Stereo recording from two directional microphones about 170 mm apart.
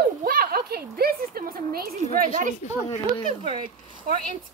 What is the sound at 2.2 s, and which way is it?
Speech, 50° right (ahead or behind).